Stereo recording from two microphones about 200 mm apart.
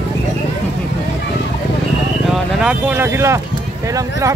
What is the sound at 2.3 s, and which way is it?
Speech, 5° right (ahead or behind).